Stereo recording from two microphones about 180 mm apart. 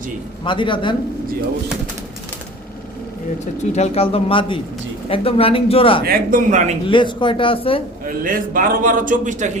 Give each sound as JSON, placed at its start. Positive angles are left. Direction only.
{"t": 0.4, "sound": "speech", "side_deg": 25}
{"t": 3.4, "sound": "speech", "side_deg": 40}
{"t": 6.1, "sound": "a man's voice", "side_deg": -45}
{"t": 6.8, "sound": "speech", "side_deg": 25}
{"t": 8.0, "sound": "a man's voice", "side_deg": -50}